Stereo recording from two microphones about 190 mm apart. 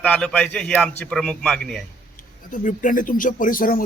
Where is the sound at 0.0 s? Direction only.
5° left (ahead or behind).